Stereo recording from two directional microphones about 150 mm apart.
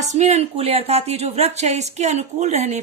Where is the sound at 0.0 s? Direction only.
50° right (ahead or behind).